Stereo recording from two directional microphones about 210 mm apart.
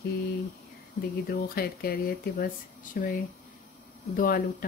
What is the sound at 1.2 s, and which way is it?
Speech, 45° left (ahead or behind).